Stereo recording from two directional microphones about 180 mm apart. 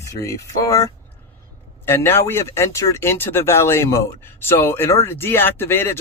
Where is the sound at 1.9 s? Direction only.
15° left (ahead or behind).